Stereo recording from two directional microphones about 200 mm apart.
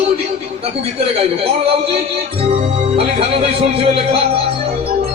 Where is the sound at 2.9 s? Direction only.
30° right (ahead or behind).